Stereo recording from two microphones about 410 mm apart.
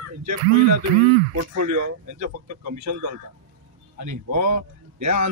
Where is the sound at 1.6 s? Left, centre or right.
Right.